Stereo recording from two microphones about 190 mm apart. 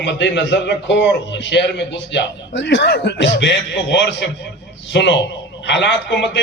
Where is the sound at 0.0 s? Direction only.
70° left (ahead or behind).